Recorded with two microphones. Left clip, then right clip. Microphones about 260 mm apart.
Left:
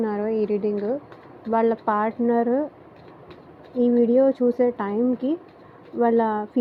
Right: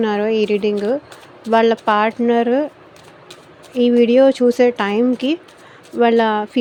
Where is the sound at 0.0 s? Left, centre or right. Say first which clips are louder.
Right 7 dB; right.